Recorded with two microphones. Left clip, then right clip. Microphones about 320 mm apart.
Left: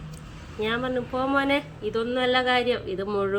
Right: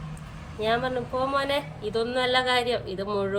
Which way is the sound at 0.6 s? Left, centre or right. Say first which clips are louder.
Right 1 dB; centre.